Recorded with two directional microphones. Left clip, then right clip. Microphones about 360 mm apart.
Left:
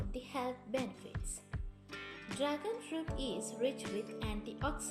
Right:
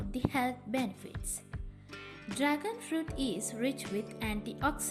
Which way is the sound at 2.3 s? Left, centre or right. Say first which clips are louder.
Right 4 dB; centre.